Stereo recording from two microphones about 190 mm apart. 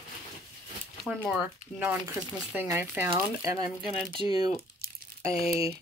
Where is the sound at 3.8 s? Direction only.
25° left (ahead or behind).